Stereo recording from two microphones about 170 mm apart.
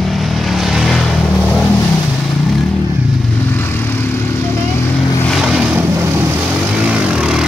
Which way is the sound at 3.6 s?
10° left (ahead or behind).